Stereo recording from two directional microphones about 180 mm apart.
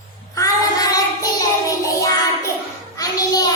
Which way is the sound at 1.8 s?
15° left (ahead or behind).